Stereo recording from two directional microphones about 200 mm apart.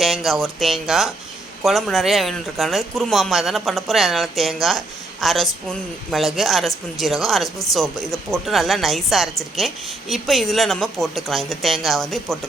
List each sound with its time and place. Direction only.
0.0 s a woman's voice: centre (ahead or behind)